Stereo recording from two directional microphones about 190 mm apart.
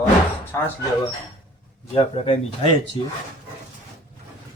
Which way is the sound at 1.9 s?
30° left (ahead or behind).